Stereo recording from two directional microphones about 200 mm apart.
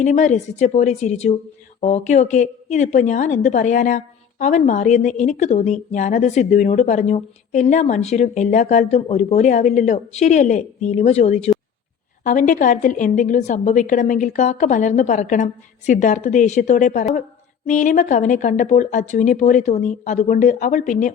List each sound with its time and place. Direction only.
0.0 s a woman's voice: 35° left (ahead or behind)